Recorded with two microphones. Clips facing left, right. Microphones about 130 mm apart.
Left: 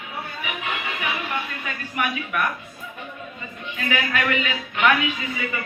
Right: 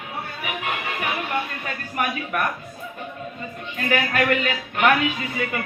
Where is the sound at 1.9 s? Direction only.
40° right (ahead or behind).